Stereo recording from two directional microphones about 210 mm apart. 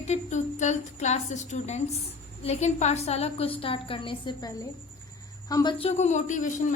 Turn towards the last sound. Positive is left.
turn(degrees=35)  # may be behind; listen again after turning